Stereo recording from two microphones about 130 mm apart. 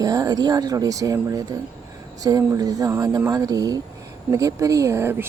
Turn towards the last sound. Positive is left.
turn(degrees=-20)  # may be behind; listen again after turning